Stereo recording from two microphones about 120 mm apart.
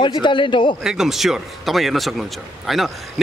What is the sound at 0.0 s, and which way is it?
Speech, 40° left (ahead or behind).